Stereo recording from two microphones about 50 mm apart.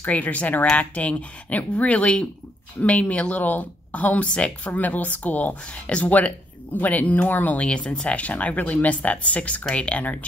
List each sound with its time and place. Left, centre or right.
0.0 s speech: left
7.6 s speech: centre
8.2 s speech: left